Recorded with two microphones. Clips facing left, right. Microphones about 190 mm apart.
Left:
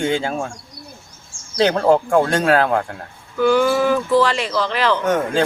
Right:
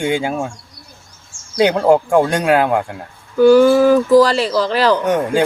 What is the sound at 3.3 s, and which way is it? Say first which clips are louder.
Speech: right 7 dB; 40° right (ahead or behind).